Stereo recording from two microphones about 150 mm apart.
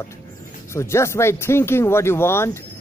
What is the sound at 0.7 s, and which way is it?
Speech, 20° left (ahead or behind).